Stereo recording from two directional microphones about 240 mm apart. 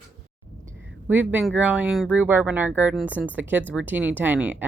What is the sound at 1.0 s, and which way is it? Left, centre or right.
Speech, centre.